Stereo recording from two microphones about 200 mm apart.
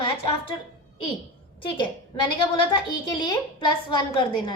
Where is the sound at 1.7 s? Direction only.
25° left (ahead or behind).